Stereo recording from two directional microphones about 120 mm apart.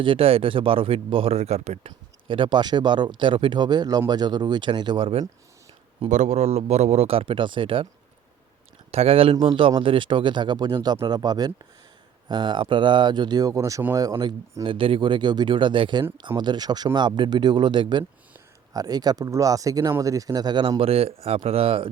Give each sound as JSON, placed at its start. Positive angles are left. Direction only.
{"t": 0.0, "sound": "a man's voice", "side_deg": -50}
{"t": 2.2, "sound": "speech", "side_deg": -45}
{"t": 6.1, "sound": "a man's voice", "side_deg": -75}
{"t": 8.9, "sound": "a man's voice", "side_deg": -55}
{"t": 14.6, "sound": "a man's voice", "side_deg": -45}